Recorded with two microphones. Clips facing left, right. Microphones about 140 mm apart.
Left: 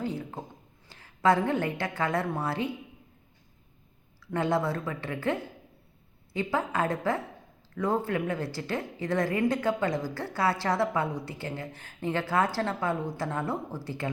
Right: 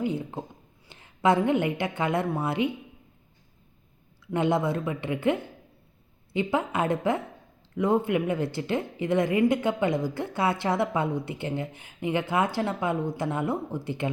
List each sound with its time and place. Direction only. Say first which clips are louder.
0.0 s a woman's voice: right 4 dB; 20° right (ahead or behind)
4.3 s a woman's voice: right 3 dB; 20° right (ahead or behind)